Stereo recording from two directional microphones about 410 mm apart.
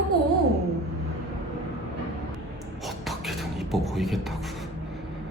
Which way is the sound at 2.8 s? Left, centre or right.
Centre.